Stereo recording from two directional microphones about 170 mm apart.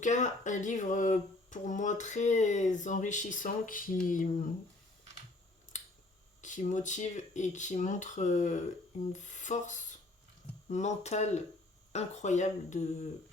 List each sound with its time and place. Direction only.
0.0 s speech: 45° left (ahead or behind)
5.7 s finger snapping: 45° left (ahead or behind)
6.4 s speech: 45° left (ahead or behind)